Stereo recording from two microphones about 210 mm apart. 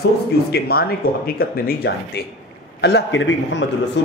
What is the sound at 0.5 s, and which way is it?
A man's voice, 50° left (ahead or behind).